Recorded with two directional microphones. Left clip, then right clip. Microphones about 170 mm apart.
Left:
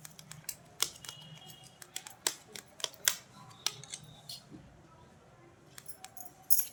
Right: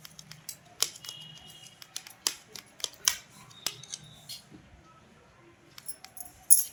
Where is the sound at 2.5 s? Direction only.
20° left (ahead or behind).